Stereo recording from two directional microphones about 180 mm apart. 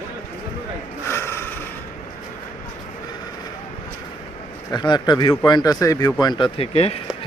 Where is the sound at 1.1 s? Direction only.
15° left (ahead or behind).